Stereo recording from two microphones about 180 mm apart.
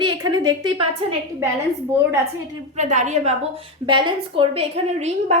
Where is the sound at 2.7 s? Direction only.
40° right (ahead or behind).